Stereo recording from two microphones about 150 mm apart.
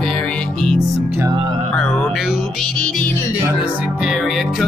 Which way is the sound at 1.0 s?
15° right (ahead or behind).